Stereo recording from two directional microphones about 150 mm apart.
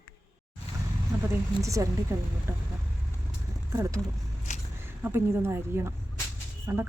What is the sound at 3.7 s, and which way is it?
Speech, 20° right (ahead or behind).